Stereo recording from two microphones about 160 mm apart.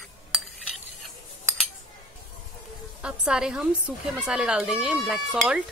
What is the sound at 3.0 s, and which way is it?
Speech, 5° right (ahead or behind).